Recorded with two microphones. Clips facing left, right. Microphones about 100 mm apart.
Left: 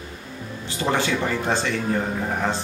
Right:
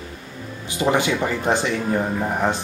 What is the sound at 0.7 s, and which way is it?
Speech, 15° right (ahead or behind).